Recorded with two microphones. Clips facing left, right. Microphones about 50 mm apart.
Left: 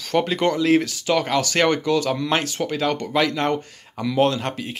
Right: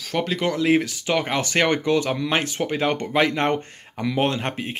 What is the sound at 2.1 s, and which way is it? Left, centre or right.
Speech, centre.